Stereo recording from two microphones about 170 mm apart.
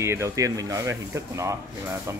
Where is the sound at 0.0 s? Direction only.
15° right (ahead or behind).